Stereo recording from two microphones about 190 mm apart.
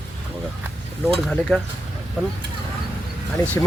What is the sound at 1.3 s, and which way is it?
Speech, 5° left (ahead or behind).